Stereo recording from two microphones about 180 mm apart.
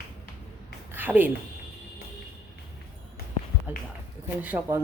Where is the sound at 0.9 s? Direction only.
10° right (ahead or behind).